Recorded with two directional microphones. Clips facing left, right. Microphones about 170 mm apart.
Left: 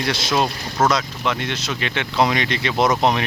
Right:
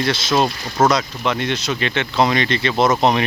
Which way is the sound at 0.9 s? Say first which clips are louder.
Right 2 dB; 5° left (ahead or behind).